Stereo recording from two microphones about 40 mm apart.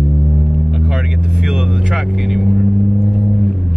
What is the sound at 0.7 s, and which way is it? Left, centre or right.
Vehicle, centre.